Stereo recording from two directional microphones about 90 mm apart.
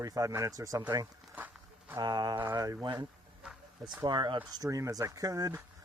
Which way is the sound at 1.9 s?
50° right (ahead or behind).